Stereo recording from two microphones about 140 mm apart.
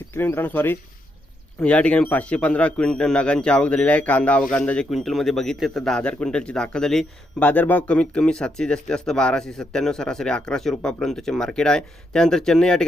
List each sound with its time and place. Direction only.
0.1 s a man's voice: 15° left (ahead or behind)